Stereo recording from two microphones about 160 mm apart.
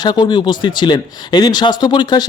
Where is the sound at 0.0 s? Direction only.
30° left (ahead or behind).